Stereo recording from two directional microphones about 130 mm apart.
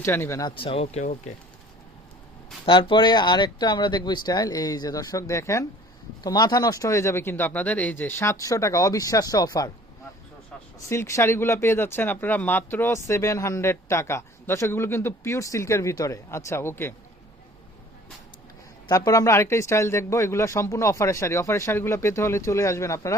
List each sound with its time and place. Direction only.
0.0 s speech: 20° left (ahead or behind)
0.5 s speech: 45° left (ahead or behind)
1.0 s speech: 80° left
2.6 s speech: 40° left (ahead or behind)
10.8 s speech: 20° left (ahead or behind)
18.9 s speech: 25° left (ahead or behind)